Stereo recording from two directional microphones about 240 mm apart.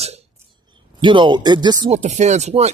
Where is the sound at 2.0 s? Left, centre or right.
Right.